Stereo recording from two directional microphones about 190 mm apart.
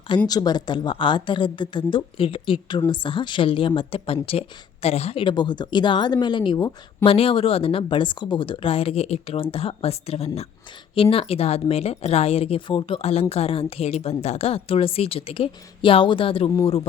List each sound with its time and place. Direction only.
0.3 s speech: 20° left (ahead or behind)